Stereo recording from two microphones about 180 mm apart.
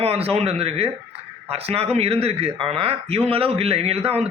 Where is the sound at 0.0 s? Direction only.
35° right (ahead or behind).